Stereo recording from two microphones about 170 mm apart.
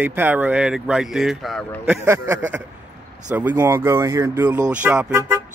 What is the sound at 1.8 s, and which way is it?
Speech, 15° right (ahead or behind).